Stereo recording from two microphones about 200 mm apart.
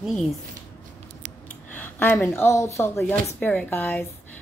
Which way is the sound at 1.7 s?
10° left (ahead or behind).